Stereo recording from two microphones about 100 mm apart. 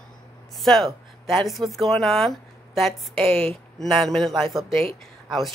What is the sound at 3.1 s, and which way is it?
Speech, 70° right (ahead or behind).